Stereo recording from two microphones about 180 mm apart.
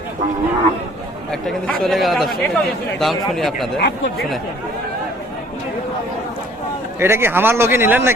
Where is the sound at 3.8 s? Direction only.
65° left (ahead or behind).